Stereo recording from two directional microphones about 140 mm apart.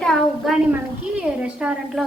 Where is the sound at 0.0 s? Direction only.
Centre (ahead or behind).